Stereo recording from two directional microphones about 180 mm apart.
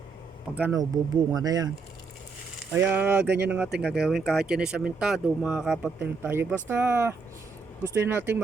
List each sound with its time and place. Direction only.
0.5 s speech: 15° right (ahead or behind)
2.7 s speech: 10° right (ahead or behind)